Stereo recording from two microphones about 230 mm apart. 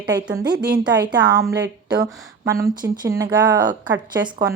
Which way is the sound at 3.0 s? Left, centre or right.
Centre.